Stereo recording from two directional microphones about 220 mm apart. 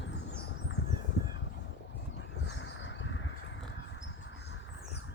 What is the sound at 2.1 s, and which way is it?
Crow, 55° left (ahead or behind).